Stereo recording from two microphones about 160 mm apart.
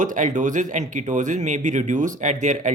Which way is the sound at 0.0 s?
50° right (ahead or behind).